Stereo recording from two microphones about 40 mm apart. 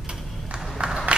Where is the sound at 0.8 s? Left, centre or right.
Right.